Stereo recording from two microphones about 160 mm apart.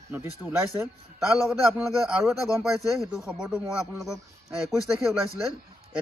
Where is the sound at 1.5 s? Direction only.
5° right (ahead or behind).